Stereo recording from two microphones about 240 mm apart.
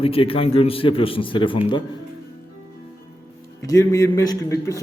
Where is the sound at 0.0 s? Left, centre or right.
Left.